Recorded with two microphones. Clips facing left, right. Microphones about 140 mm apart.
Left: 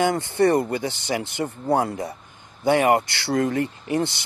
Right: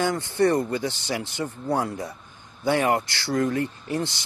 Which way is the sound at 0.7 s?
60° left (ahead or behind).